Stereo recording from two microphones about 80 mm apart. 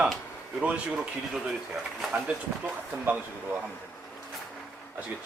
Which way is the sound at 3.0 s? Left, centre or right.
Centre.